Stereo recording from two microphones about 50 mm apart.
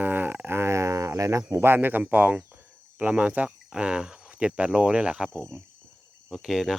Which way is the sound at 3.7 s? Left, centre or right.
Centre.